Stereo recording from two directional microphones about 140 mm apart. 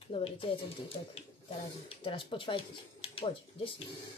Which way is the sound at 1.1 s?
40° left (ahead or behind).